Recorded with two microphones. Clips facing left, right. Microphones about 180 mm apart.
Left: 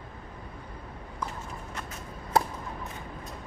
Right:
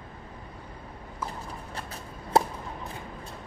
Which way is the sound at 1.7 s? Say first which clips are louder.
Even; 30° right (ahead or behind).